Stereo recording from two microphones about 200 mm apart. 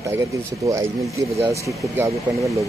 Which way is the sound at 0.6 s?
15° right (ahead or behind).